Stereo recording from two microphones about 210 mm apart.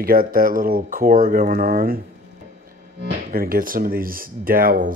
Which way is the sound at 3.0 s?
45° right (ahead or behind).